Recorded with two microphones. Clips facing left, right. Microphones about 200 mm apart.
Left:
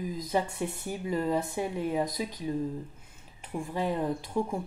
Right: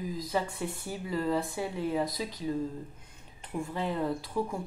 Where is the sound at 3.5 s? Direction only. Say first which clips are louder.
Left 2 dB; 15° left (ahead or behind).